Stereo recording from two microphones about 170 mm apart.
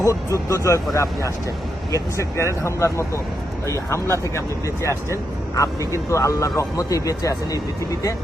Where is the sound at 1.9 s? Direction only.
15° left (ahead or behind).